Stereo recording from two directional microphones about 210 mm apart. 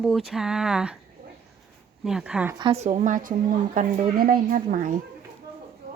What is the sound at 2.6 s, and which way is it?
A woman's voice, 30° right (ahead or behind).